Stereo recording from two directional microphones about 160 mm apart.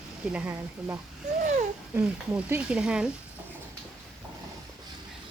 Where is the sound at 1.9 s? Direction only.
10° right (ahead or behind).